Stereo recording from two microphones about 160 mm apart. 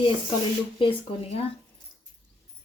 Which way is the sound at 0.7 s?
35° left (ahead or behind).